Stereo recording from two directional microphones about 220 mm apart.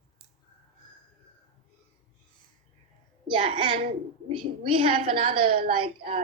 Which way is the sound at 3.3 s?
25° right (ahead or behind).